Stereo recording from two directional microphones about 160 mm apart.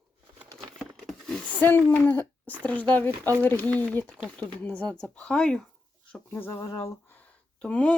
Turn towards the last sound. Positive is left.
turn(degrees=5)  # may be behind; listen again after turning